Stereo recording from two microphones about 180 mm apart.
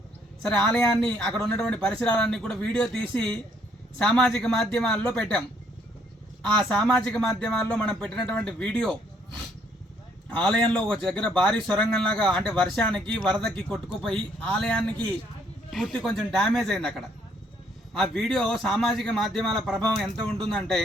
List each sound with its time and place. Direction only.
0.4 s a man's voice: 5° left (ahead or behind)
6.6 s a man's voice: 5° left (ahead or behind)
10.2 s a man's voice: 5° left (ahead or behind)